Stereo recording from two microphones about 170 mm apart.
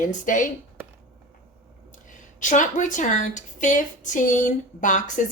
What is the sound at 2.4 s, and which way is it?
Speech, 50° left (ahead or behind).